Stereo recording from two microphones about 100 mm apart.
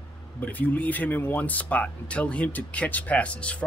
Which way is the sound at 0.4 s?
15° left (ahead or behind).